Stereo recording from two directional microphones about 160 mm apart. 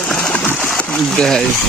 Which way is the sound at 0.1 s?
5° left (ahead or behind).